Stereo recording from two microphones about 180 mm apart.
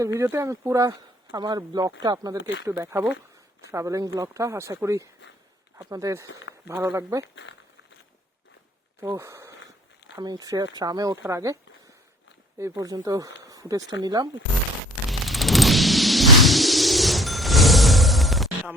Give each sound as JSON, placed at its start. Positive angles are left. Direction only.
{"t": 0.0, "sound": "speech", "side_deg": -15}
{"t": 2.4, "sound": "speech", "side_deg": 90}
{"t": 2.6, "sound": "speech", "side_deg": -15}
{"t": 9.0, "sound": "speech", "side_deg": -15}
{"t": 12.5, "sound": "speech", "side_deg": -15}
{"t": 15.3, "sound": "a sound", "side_deg": 0}